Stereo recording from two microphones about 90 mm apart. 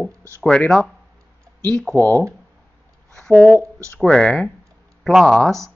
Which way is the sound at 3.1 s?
5° left (ahead or behind).